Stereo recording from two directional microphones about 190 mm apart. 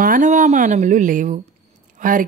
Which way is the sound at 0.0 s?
45° right (ahead or behind).